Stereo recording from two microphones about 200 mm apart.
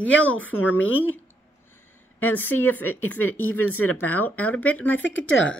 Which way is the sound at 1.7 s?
10° left (ahead or behind).